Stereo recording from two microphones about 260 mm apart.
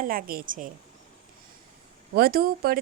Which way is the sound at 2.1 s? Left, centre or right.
Right.